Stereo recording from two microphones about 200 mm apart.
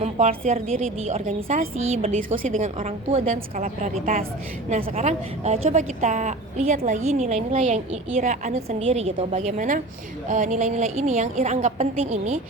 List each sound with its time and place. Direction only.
0.0 s a woman's voice: 35° right (ahead or behind)